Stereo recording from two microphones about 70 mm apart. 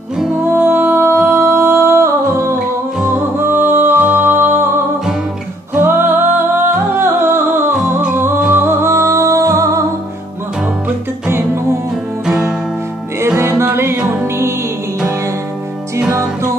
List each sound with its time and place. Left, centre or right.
0.5 s music: right
3.3 s music: right
11.2 s music: right
12.3 s music: centre
13.4 s music: right